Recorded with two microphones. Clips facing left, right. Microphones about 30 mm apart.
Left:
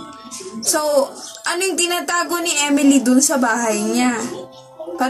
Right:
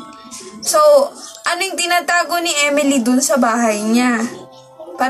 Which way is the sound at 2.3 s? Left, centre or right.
Centre.